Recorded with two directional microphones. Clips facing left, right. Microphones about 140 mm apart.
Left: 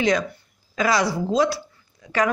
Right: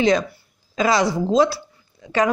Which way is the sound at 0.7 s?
25° right (ahead or behind).